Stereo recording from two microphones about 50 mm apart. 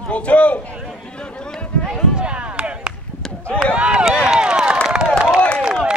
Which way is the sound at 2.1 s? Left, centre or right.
Right.